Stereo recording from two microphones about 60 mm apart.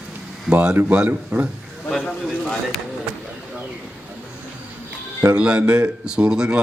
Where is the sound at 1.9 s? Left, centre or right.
Centre.